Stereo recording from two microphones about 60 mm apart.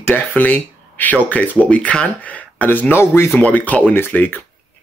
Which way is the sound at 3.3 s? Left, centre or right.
Left.